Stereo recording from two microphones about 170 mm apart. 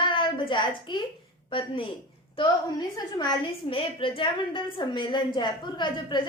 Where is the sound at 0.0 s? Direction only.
30° left (ahead or behind).